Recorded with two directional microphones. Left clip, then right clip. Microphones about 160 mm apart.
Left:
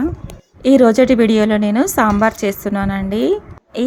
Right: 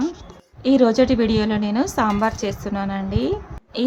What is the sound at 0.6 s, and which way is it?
A woman's voice, 35° left (ahead or behind).